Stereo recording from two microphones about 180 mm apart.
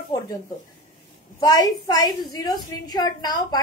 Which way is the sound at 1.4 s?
20° left (ahead or behind).